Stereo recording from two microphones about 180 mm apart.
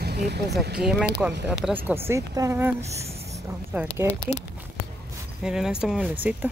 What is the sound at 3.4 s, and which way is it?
Speech, 15° right (ahead or behind).